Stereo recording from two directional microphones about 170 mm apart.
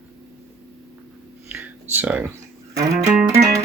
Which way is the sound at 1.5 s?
10° right (ahead or behind).